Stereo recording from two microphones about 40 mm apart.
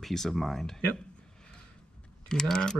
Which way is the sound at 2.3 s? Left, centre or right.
Centre.